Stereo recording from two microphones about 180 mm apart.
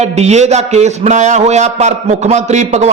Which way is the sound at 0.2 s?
35° right (ahead or behind).